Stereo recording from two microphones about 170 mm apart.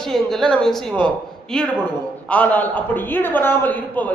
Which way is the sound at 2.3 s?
10° left (ahead or behind).